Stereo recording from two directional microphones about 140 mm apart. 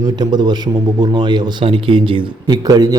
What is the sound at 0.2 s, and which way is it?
A man's voice, 30° right (ahead or behind).